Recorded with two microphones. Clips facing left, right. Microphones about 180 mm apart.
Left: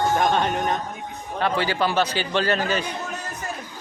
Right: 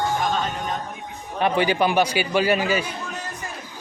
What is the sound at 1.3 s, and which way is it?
A man's voice, 15° right (ahead or behind).